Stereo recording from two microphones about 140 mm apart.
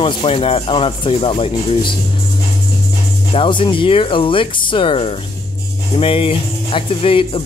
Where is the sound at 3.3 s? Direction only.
40° left (ahead or behind).